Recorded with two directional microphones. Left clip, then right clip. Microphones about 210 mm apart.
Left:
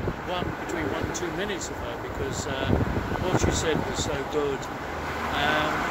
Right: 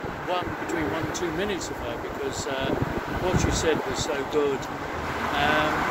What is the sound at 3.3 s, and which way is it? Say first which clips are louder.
Speech: even; 5° right (ahead or behind).